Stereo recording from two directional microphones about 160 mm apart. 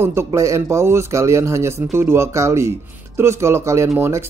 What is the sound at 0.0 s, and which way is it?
Speech, 15° right (ahead or behind).